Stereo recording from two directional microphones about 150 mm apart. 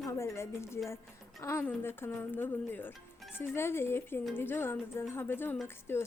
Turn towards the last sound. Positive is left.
turn(degrees=15)  # may be behind; listen again after turning